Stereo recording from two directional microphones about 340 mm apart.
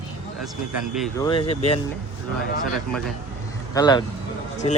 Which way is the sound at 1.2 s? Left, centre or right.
Centre.